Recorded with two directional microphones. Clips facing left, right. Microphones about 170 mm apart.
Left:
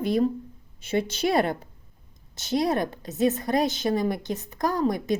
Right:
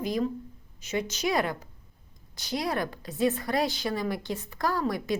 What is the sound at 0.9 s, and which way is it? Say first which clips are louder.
A woman's voice: left 4 dB; 30° left (ahead or behind).